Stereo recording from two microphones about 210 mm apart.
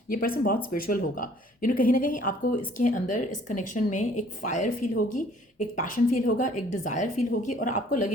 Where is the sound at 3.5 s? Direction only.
35° left (ahead or behind).